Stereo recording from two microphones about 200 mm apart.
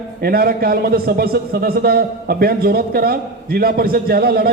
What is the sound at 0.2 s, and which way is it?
A man's voice, 50° right (ahead or behind).